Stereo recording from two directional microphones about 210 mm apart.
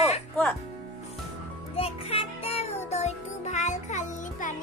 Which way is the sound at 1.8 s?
30° left (ahead or behind).